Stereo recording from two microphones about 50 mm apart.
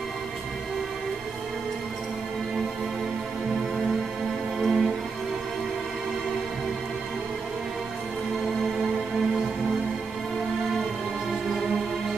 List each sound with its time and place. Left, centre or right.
4.6 s music: centre